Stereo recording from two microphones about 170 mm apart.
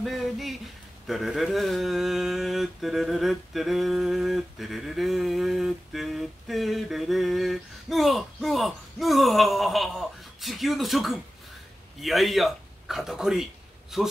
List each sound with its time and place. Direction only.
0.0 s a man's voice: centre (ahead or behind)